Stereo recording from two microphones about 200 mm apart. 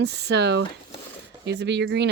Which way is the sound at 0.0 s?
55° right (ahead or behind).